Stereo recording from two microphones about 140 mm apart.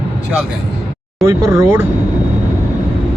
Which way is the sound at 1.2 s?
20° right (ahead or behind).